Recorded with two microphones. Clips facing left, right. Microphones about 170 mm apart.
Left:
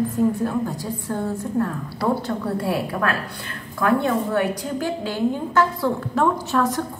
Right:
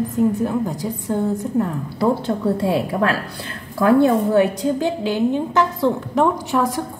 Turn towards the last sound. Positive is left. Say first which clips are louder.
# right 1 dB
turn(degrees=-15)  # may be behind; listen again after turning